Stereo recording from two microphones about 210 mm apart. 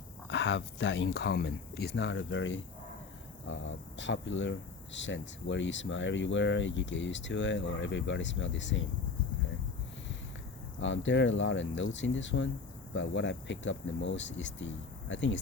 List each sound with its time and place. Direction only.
0.3 s speech: 60° left (ahead or behind)
10.8 s speech: 60° left (ahead or behind)